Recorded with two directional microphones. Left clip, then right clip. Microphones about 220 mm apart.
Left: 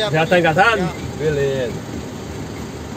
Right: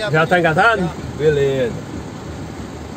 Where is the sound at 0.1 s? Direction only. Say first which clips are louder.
Right 3 dB; 20° right (ahead or behind).